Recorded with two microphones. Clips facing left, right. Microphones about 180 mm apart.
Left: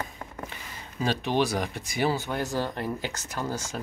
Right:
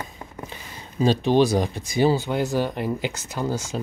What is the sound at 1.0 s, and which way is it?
Speech, 30° right (ahead or behind).